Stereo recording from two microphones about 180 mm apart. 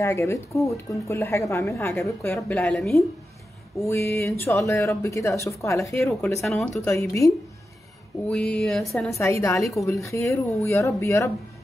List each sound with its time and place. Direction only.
0.0 s a woman's voice: 15° left (ahead or behind)
3.8 s a woman's voice: 15° left (ahead or behind)
6.4 s a woman's voice: centre (ahead or behind)
6.8 s a woman's voice: 15° left (ahead or behind)
8.3 s a woman's voice: 5° left (ahead or behind)
9.1 s a woman's voice: 15° left (ahead or behind)